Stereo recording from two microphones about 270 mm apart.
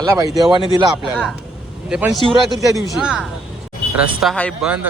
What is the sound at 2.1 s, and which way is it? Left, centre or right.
Speech, centre.